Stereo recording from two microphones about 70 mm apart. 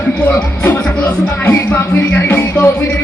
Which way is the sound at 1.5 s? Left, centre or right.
Left.